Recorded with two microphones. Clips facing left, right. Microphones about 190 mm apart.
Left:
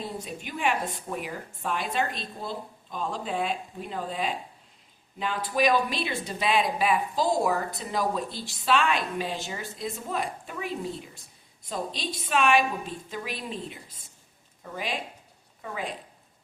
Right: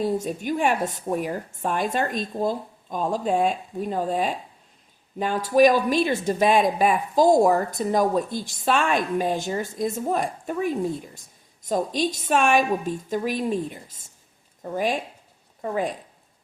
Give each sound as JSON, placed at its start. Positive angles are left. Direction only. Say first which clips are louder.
{"t": 0.0, "sound": "a woman's voice", "louder": "right 11 dB", "side_deg": -45}